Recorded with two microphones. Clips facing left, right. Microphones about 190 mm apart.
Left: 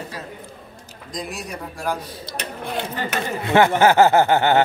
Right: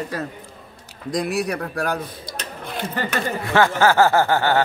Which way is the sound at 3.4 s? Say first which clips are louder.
Left 3 dB; 20° left (ahead or behind).